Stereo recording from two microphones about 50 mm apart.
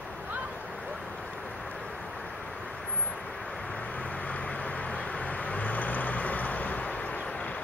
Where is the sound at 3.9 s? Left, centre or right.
Left.